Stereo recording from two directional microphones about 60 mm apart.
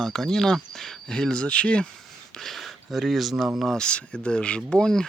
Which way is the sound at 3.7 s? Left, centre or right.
Centre.